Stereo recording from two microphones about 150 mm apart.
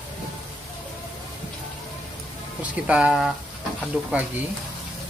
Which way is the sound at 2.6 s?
10° right (ahead or behind).